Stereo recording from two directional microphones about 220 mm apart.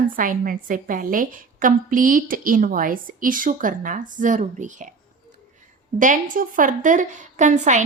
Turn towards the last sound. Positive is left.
turn(degrees=-35)  # may be behind; listen again after turning